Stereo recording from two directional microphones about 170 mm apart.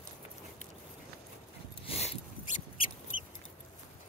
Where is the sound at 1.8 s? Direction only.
35° left (ahead or behind).